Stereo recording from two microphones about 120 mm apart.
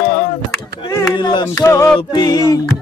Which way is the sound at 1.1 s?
40° left (ahead or behind).